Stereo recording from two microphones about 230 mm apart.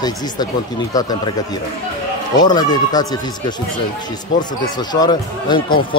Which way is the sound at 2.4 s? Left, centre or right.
Centre.